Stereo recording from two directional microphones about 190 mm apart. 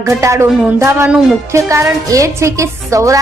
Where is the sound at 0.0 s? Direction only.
15° right (ahead or behind).